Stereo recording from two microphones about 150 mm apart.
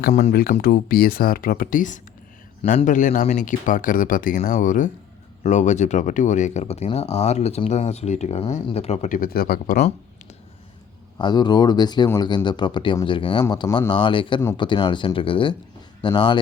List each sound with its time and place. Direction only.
0.1 s speech: 55° left (ahead or behind)
0.6 s speech: 80° left
11.2 s speech: 30° left (ahead or behind)